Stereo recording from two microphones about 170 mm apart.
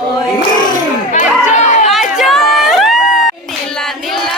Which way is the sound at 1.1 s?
45° left (ahead or behind).